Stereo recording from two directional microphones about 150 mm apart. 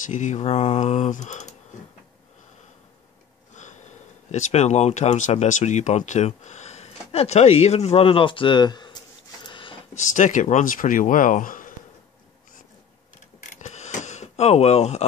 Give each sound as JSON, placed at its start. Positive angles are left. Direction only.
{"t": 0.0, "sound": "speech", "side_deg": 55}
{"t": 3.5, "sound": "a sound", "side_deg": 50}
{"t": 4.3, "sound": "speech", "side_deg": 50}
{"t": 9.9, "sound": "speech", "side_deg": 55}
{"t": 13.4, "sound": "camera", "side_deg": 55}